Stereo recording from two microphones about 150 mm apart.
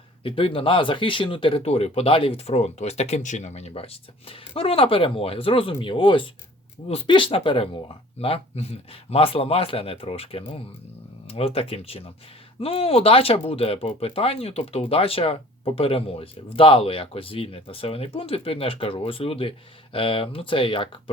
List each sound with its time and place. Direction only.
0.2 s speech: 35° left (ahead or behind)